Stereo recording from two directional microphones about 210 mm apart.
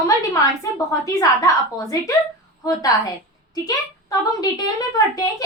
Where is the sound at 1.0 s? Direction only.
15° left (ahead or behind).